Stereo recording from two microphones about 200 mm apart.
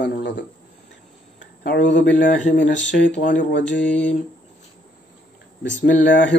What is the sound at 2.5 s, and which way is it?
Speech, 60° left (ahead or behind).